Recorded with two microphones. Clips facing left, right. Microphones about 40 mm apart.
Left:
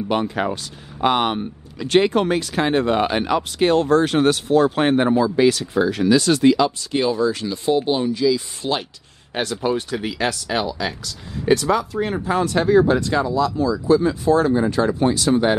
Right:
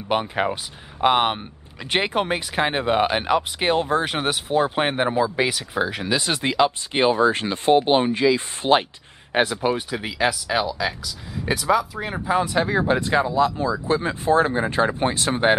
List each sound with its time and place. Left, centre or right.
0.1 s speech: centre; by 8.8 s right
9.3 s speech: centre; by 15.5 s right